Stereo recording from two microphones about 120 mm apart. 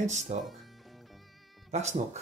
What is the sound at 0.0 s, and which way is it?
Speech, 75° right (ahead or behind).